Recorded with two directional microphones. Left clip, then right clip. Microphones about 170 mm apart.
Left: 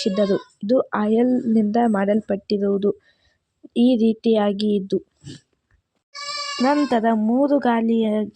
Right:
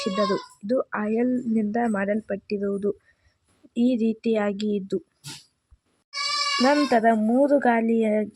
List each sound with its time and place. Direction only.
0.0 s speech: 20° left (ahead or behind)
6.6 s speech: centre (ahead or behind)